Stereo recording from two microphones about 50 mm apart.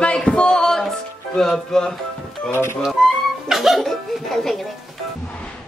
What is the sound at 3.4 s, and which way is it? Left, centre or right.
Speech, centre.